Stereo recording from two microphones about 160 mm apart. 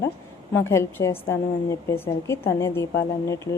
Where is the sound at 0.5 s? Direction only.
15° left (ahead or behind).